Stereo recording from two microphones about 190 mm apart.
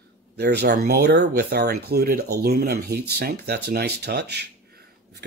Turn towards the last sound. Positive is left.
turn(degrees=-60)  # may be behind; listen again after turning